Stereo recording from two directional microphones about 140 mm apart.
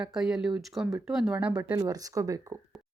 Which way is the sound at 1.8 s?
25° right (ahead or behind).